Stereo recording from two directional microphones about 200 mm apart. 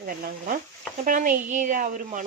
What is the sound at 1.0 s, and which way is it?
Speech, 40° right (ahead or behind).